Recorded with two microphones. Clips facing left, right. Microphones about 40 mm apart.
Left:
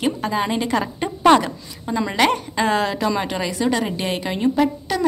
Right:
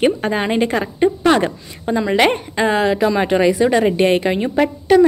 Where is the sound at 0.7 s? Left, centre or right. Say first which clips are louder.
Right 1 dB; right.